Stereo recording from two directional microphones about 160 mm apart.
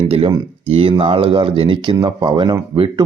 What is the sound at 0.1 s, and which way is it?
Speech, 35° right (ahead or behind).